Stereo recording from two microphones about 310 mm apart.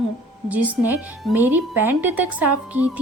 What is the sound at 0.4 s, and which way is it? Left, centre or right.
Speech, centre.